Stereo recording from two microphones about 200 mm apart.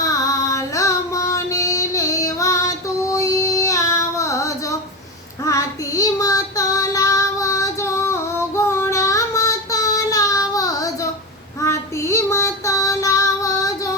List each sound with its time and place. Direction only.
0.0 s female singing: 15° left (ahead or behind)
5.5 s child singing: 15° left (ahead or behind)